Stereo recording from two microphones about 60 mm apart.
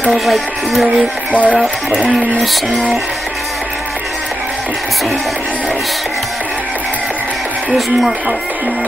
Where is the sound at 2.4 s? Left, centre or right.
Centre.